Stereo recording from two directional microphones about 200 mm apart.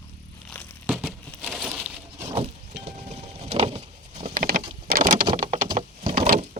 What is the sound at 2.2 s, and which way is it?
Vehicle, 25° right (ahead or behind).